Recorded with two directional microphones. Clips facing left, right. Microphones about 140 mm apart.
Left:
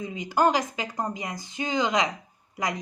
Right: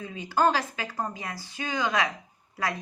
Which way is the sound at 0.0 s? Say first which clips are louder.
Left 1 dB; 15° left (ahead or behind).